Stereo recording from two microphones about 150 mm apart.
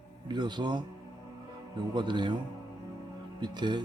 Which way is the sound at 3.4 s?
30° right (ahead or behind).